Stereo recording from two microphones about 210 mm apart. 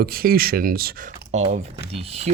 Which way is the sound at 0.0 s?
45° right (ahead or behind).